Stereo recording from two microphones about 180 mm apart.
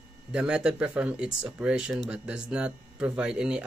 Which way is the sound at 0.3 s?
5° right (ahead or behind).